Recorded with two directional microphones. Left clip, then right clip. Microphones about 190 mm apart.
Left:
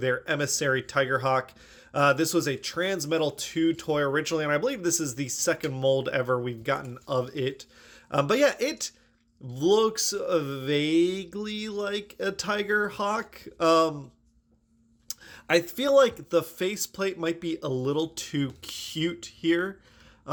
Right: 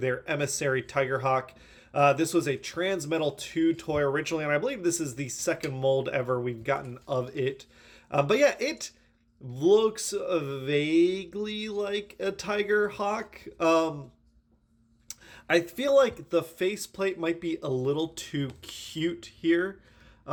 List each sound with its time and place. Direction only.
0.0 s speech: 15° left (ahead or behind)
15.0 s speech: 20° left (ahead or behind)
20.3 s grunt: 20° left (ahead or behind)